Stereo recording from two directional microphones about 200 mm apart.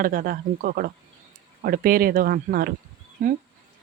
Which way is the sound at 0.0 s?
45° right (ahead or behind).